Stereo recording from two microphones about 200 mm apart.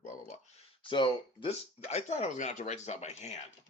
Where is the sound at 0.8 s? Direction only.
25° left (ahead or behind).